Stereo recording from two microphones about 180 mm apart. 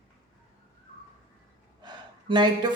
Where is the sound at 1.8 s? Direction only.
25° right (ahead or behind).